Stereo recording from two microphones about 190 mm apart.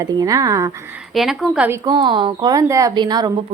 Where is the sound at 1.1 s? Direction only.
Centre (ahead or behind).